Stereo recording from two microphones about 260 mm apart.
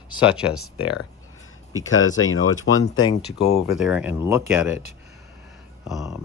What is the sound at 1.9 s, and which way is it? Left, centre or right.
Speech, left.